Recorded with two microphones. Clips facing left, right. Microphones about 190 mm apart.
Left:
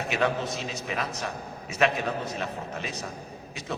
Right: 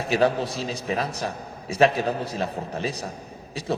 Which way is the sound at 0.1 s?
35° right (ahead or behind).